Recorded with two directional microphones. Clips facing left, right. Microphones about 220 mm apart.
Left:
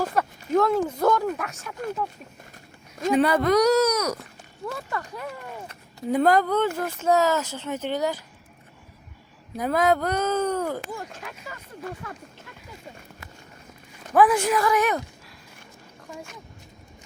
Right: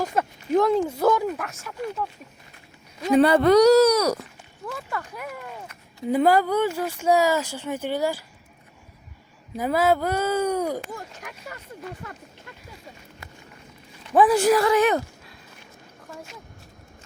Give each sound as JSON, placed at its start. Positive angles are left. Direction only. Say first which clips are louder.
{"t": 0.0, "sound": "speech", "louder": "even", "side_deg": -20}
{"t": 0.9, "sound": "speech", "louder": "right 1 dB", "side_deg": -5}
{"t": 3.2, "sound": "speech", "louder": "right 5 dB", "side_deg": -30}
{"t": 4.9, "sound": "speech", "louder": "even", "side_deg": -5}
{"t": 9.6, "sound": "speech", "louder": "right 1 dB", "side_deg": -5}
{"t": 14.1, "sound": "a woman's voice", "louder": "right 2 dB", "side_deg": -25}